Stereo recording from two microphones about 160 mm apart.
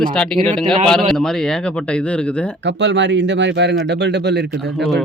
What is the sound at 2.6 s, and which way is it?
Speech, 90° right.